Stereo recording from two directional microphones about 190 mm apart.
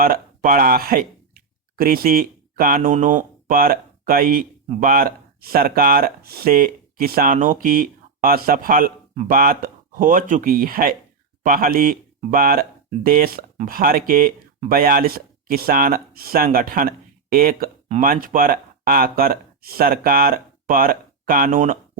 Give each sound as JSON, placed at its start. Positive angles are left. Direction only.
{"t": 0.0, "sound": "speech", "side_deg": -50}